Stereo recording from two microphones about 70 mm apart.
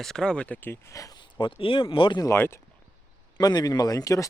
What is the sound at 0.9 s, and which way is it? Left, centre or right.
Speech, left.